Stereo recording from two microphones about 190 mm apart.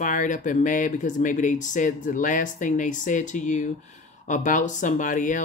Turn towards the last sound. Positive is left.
turn(degrees=45)  # may be behind; listen again after turning